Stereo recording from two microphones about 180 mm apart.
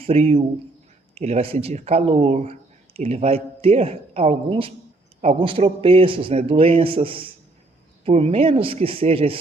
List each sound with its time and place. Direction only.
0.0 s speech: 35° right (ahead or behind)